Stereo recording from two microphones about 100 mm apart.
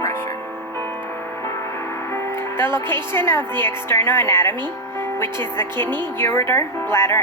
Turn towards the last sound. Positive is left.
turn(degrees=25)  # may be behind; listen again after turning